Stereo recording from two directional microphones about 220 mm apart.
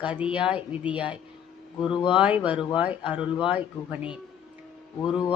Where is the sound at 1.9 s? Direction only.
20° left (ahead or behind).